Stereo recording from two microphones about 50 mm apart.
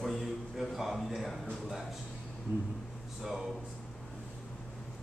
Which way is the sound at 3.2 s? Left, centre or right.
Centre.